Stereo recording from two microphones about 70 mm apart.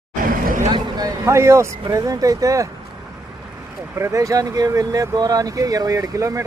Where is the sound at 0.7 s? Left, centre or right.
Right.